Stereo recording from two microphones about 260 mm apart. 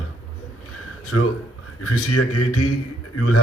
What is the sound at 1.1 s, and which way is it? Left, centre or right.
A man's voice, left.